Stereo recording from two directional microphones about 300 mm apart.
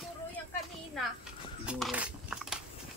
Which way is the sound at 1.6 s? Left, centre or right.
Centre.